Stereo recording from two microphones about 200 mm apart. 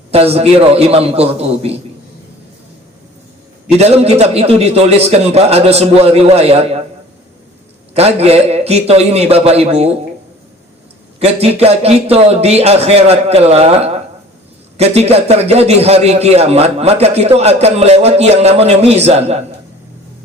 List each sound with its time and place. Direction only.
0.1 s a man's voice: 30° right (ahead or behind)
3.7 s a man's voice: 30° right (ahead or behind)
7.9 s a man's voice: 30° right (ahead or behind)
11.2 s a man's voice: 30° right (ahead or behind)